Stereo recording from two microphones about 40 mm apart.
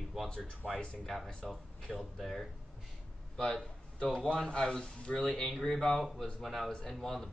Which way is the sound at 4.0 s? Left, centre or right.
Left.